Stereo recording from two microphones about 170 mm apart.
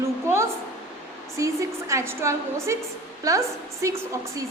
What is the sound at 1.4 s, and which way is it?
A woman's voice, 15° right (ahead or behind).